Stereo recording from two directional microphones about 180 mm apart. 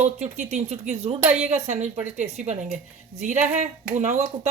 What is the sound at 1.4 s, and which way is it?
A woman's voice, 40° right (ahead or behind).